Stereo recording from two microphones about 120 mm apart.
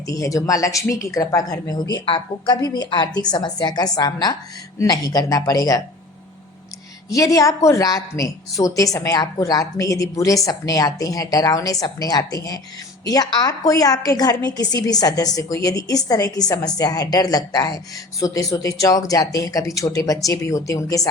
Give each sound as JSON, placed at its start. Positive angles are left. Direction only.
{"t": 0.1, "sound": "a woman's voice", "side_deg": 30}
{"t": 7.1, "sound": "a woman's voice", "side_deg": 30}